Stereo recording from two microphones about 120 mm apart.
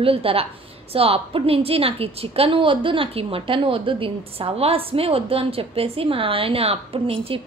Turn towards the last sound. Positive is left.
turn(degrees=-50)  # may be behind; listen again after turning